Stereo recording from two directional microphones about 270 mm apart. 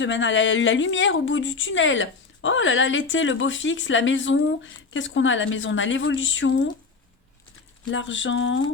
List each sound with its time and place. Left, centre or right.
0.0 s speech: left
7.9 s speech: left